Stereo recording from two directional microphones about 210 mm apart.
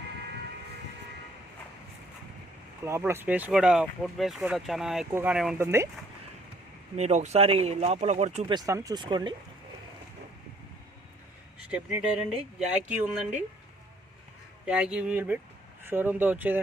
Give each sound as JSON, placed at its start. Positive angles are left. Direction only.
{"t": 2.8, "sound": "speech", "side_deg": -10}
{"t": 6.9, "sound": "speech", "side_deg": -30}
{"t": 8.5, "sound": "speech", "side_deg": -15}
{"t": 11.7, "sound": "speech", "side_deg": -5}
{"t": 14.7, "sound": "speech", "side_deg": -5}